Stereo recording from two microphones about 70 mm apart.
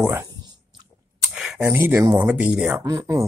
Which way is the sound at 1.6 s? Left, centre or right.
Right.